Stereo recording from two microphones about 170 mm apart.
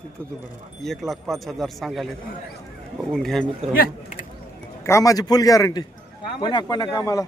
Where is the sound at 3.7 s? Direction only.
50° left (ahead or behind).